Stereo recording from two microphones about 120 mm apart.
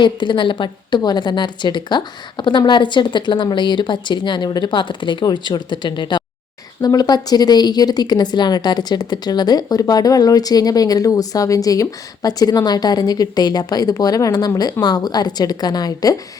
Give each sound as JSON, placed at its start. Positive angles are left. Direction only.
{"t": 0.0, "sound": "a woman's voice", "side_deg": 40}